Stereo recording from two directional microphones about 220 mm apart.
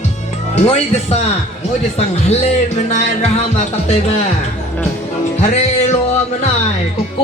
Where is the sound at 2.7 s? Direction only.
30° left (ahead or behind).